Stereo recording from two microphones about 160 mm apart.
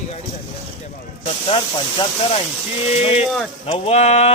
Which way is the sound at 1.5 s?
35° left (ahead or behind).